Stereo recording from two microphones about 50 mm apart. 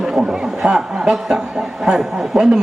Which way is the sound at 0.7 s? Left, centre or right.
Centre.